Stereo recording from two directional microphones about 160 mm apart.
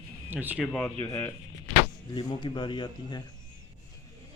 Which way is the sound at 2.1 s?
30° left (ahead or behind).